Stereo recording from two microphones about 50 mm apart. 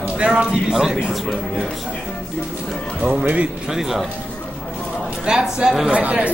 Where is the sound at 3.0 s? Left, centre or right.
Right.